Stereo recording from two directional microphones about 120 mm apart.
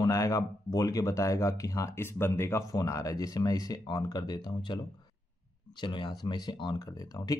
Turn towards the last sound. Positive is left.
turn(degrees=30)  # may be behind; listen again after turning